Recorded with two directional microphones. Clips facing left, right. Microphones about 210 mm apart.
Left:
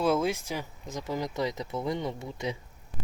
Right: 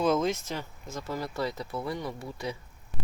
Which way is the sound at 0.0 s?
10° left (ahead or behind).